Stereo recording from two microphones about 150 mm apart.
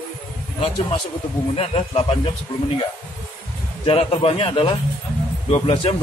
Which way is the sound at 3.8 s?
40° left (ahead or behind).